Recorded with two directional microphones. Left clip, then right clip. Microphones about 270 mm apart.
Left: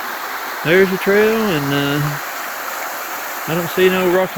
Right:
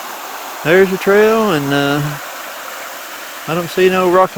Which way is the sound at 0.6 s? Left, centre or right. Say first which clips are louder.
Right 3 dB; centre.